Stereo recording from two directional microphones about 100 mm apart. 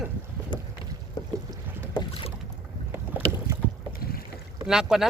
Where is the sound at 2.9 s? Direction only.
20° right (ahead or behind).